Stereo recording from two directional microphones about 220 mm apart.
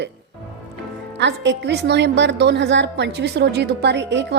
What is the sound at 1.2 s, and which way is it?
A woman's voice, 55° right (ahead or behind).